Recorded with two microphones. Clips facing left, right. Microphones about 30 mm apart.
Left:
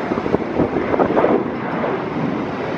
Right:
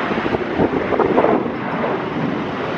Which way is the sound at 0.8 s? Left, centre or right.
Centre.